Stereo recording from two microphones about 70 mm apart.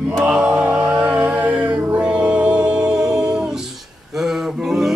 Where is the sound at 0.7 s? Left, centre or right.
Centre.